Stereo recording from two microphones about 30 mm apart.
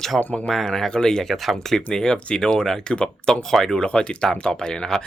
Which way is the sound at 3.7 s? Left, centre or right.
Left.